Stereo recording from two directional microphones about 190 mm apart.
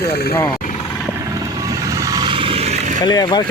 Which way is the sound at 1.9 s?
15° right (ahead or behind).